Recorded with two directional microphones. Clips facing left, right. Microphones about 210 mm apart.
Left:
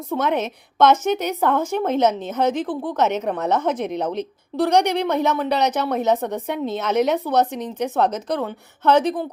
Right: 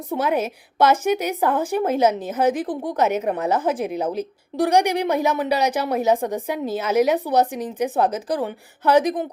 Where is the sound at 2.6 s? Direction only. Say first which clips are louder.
Even; 40° right (ahead or behind).